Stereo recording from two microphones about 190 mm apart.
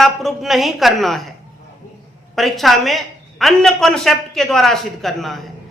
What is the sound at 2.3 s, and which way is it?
A woman's voice, centre (ahead or behind).